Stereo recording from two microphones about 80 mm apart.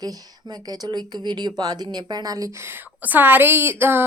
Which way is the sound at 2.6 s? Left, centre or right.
Right.